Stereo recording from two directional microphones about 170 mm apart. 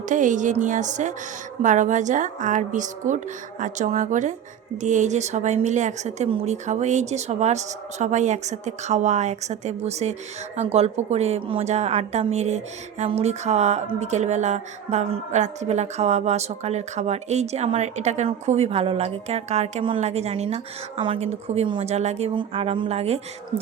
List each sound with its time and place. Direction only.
0.0 s a woman's voice: 50° right (ahead or behind)